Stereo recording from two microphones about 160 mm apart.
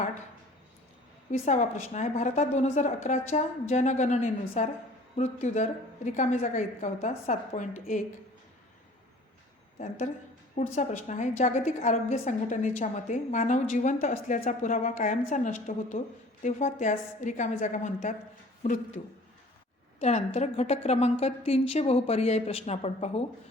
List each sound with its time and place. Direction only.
1.3 s a woman's voice: 45° left (ahead or behind)
9.7 s a woman's voice: 45° left (ahead or behind)
20.0 s a woman's voice: 45° left (ahead or behind)